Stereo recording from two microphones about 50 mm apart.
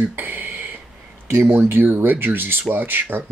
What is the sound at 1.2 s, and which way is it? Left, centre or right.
Speech, right.